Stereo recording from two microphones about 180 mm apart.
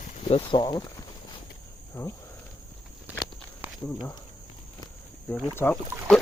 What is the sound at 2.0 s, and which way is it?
Speech, 10° left (ahead or behind).